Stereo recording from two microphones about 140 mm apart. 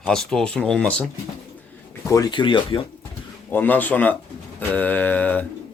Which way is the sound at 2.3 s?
35° left (ahead or behind).